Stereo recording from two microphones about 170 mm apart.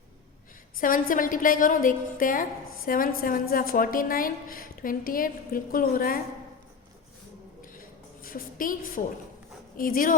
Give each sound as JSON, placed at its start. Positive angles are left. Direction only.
{"t": 0.8, "sound": "a woman's voice", "side_deg": 55}
{"t": 7.6, "sound": "a sound", "side_deg": 55}
{"t": 9.7, "sound": "a woman's voice", "side_deg": 55}